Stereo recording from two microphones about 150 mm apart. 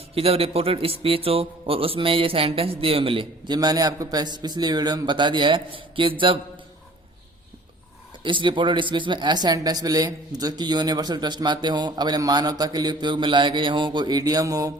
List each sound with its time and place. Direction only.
0.1 s a man's voice: 40° right (ahead or behind)
8.2 s speech: 35° right (ahead or behind)